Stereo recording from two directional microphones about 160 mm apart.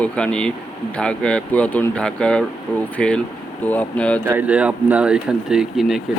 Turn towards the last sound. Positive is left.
turn(degrees=0)  # may be behind; listen again after turning